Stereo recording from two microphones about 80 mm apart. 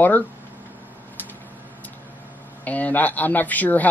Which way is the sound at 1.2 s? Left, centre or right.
Left.